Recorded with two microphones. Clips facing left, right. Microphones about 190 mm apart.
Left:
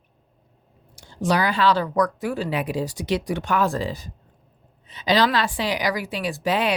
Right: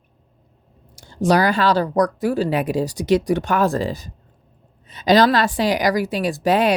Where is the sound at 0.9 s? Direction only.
40° right (ahead or behind).